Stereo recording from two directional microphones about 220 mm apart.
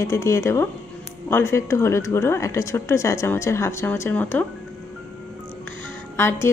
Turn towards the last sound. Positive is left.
turn(degrees=10)  # may be behind; listen again after turning